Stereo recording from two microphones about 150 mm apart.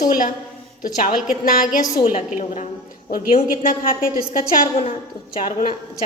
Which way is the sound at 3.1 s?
70° left (ahead or behind).